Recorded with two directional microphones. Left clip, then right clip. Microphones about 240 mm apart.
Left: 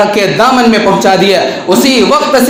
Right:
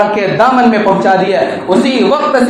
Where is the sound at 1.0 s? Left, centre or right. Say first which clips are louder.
Left 2 dB; left.